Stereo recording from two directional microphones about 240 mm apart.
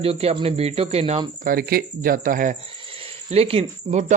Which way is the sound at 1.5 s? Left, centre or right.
Right.